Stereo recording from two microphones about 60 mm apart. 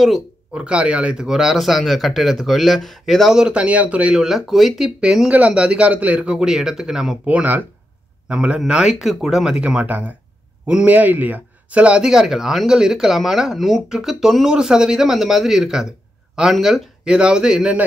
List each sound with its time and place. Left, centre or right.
0.5 s speech: centre
1.2 s speech: centre
4.2 s speech: centre
5.5 s speech: centre
7.2 s speech: right; by 9.6 s centre
9.6 s speech: right; by 16.9 s centre
17.0 s speech: centre